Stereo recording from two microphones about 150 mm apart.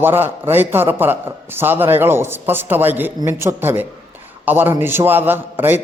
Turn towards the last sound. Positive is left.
turn(degrees=-15)  # may be behind; listen again after turning